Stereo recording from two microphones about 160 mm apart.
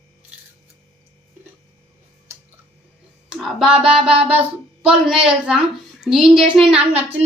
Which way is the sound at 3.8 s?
5° right (ahead or behind).